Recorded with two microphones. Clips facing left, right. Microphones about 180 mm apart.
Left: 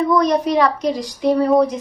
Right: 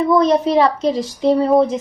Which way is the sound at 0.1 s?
25° right (ahead or behind).